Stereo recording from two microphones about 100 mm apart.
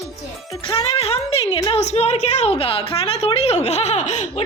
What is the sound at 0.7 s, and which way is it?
A woman's voice, 85° left.